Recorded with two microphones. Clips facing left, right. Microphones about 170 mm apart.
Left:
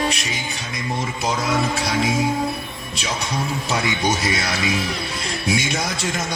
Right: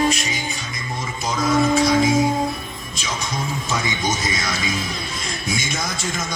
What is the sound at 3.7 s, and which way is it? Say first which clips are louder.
Speech: left 3 dB; 65° left (ahead or behind).